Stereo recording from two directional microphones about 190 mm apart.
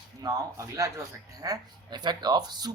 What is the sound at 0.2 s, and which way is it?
A man's voice, 15° right (ahead or behind).